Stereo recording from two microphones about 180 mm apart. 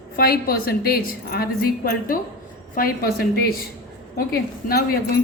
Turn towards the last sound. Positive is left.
turn(degrees=55)  # may be behind; listen again after turning